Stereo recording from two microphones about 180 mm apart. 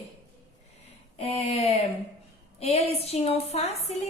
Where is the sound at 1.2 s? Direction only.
35° left (ahead or behind).